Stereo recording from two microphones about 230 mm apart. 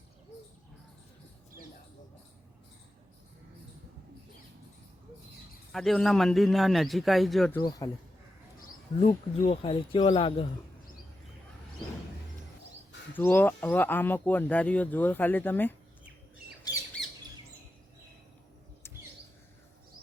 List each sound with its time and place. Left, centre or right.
5.7 s a man's voice: centre
7.6 s speech: centre
9.0 s speech: left
13.1 s speech: centre